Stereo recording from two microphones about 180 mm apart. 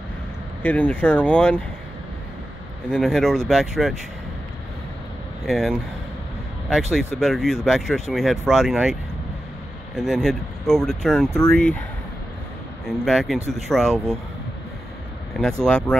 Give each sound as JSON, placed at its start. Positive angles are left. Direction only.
{"t": 0.6, "sound": "speech", "side_deg": 10}
{"t": 2.9, "sound": "speech", "side_deg": 0}
{"t": 5.5, "sound": "speech", "side_deg": 0}
{"t": 9.9, "sound": "speech", "side_deg": 0}
{"t": 13.0, "sound": "speech", "side_deg": 0}
{"t": 15.6, "sound": "speech", "side_deg": 5}